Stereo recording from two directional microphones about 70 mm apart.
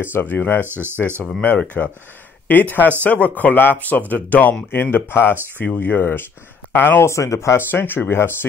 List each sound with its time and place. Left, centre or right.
0.0 s speech: left
0.7 s speech: right
1.4 s speech: left
7.1 s speech: left
7.5 s speech: left